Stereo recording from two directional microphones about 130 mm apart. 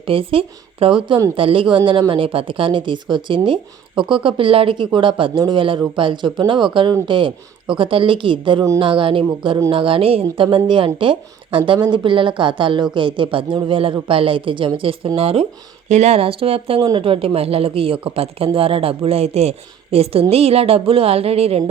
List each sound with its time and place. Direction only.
0.0 s speech: 45° right (ahead or behind)